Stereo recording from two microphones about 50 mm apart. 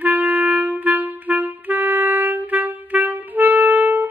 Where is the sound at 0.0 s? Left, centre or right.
Right.